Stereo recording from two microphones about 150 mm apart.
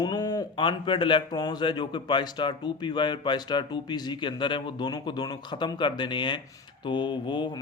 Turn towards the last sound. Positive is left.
turn(degrees=30)  # may be behind; listen again after turning